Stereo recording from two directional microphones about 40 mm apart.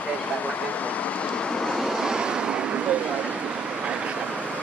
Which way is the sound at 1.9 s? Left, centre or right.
Centre.